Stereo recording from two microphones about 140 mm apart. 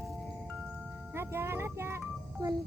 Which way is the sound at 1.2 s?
15° right (ahead or behind).